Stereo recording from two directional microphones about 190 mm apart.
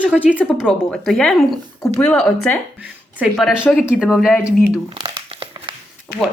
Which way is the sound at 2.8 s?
5° right (ahead or behind).